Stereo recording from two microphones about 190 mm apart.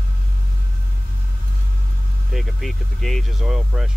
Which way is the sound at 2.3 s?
Centre (ahead or behind).